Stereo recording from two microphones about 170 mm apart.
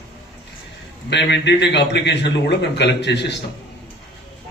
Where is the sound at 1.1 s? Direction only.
90° left.